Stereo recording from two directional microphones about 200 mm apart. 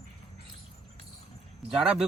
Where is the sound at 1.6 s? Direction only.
5° right (ahead or behind).